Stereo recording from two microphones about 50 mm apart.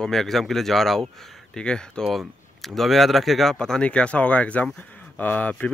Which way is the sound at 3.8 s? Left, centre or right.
Left.